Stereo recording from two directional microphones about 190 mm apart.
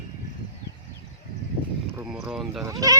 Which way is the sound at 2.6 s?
20° right (ahead or behind).